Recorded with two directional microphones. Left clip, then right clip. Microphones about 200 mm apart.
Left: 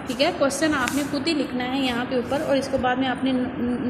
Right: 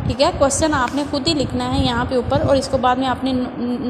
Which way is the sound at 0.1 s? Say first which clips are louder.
Right 5 dB; 25° right (ahead or behind).